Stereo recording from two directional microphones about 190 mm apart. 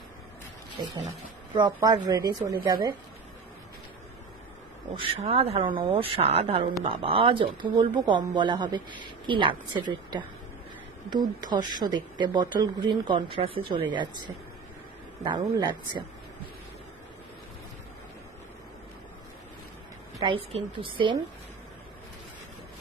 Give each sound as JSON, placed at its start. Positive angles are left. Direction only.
{"t": 1.5, "sound": "speech", "side_deg": -20}
{"t": 4.9, "sound": "a man's voice", "side_deg": -30}
{"t": 15.2, "sound": "speech", "side_deg": -25}
{"t": 20.2, "sound": "speech", "side_deg": -30}